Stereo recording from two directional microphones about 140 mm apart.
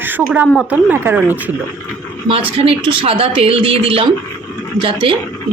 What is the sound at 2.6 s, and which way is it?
A woman's voice, 45° right (ahead or behind).